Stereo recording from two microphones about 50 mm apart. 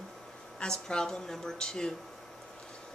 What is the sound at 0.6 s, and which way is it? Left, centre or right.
A woman's voice, centre.